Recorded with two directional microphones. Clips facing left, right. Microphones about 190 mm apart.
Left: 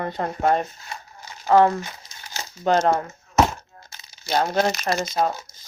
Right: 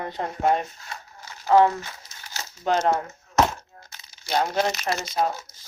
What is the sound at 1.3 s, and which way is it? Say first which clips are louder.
Crumpling: left 1 dB; 15° left (ahead or behind).